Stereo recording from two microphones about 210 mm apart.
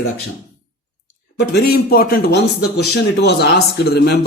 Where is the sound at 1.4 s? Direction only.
50° left (ahead or behind).